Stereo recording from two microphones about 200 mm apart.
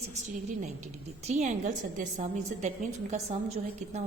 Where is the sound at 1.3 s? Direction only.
35° right (ahead or behind).